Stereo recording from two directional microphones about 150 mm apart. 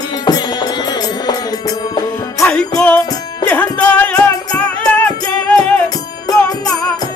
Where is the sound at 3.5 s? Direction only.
10° left (ahead or behind).